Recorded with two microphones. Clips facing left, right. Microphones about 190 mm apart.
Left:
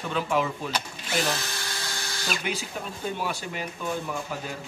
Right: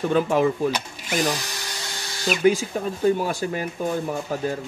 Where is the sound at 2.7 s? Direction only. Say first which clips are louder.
Right 11 dB; 45° right (ahead or behind).